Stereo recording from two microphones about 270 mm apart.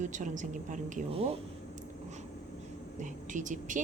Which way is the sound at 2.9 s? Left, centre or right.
Right.